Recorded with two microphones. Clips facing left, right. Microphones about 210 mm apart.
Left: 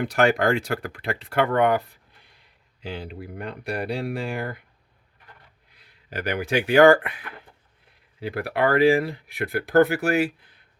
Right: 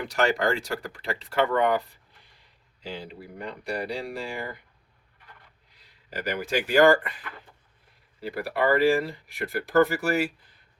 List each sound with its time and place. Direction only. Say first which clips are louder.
0.0 s speech: left 4 dB; 55° left (ahead or behind)
5.7 s speech: left 3 dB; 60° left (ahead or behind)